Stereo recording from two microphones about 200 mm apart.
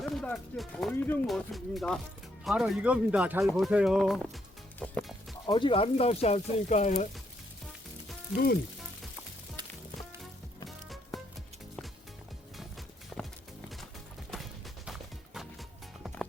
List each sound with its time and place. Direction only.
0.1 s speech: centre (ahead or behind)
4.8 s music: 5° left (ahead or behind)
5.5 s speech: 25° left (ahead or behind)
10.7 s music: centre (ahead or behind)
12.5 s music: centre (ahead or behind)
14.8 s music: centre (ahead or behind)